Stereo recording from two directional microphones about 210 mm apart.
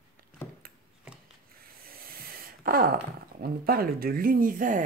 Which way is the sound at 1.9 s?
45° right (ahead or behind).